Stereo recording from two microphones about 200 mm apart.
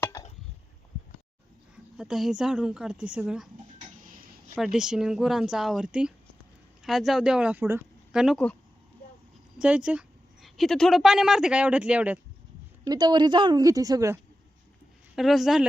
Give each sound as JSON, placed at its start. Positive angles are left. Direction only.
{"t": 0.0, "sound": "a sound", "side_deg": 15}
{"t": 1.7, "sound": "a woman's voice", "side_deg": -5}
{"t": 3.8, "sound": "a sound", "side_deg": -40}
{"t": 4.5, "sound": "a woman's voice", "side_deg": -5}
{"t": 9.6, "sound": "a woman's voice", "side_deg": -5}
{"t": 12.9, "sound": "a woman's voice", "side_deg": -20}
{"t": 15.1, "sound": "a woman's voice", "side_deg": 0}